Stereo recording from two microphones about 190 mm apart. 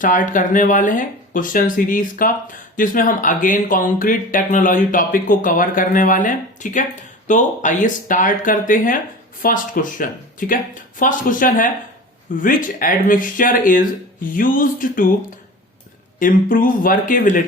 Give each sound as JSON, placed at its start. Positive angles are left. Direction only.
{"t": 0.0, "sound": "speech", "side_deg": 45}
{"t": 16.1, "sound": "speech", "side_deg": 45}